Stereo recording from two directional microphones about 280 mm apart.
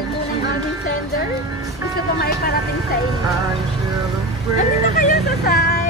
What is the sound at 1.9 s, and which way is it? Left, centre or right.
Speech, left.